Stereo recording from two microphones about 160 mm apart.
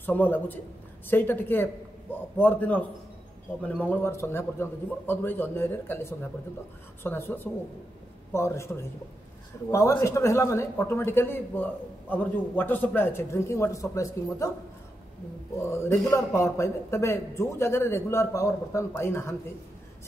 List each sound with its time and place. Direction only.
0.0 s a man's voice: 10° left (ahead or behind)
9.7 s a man's voice: 20° left (ahead or behind)
15.7 s a man's voice: 15° left (ahead or behind)